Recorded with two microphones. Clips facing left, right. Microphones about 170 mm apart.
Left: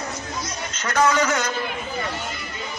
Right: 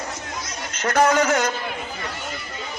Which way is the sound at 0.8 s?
50° right (ahead or behind).